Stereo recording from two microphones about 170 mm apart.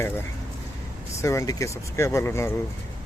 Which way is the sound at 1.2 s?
15° left (ahead or behind).